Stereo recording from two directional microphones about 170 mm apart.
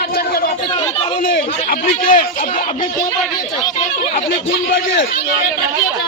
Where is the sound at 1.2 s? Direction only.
55° left (ahead or behind).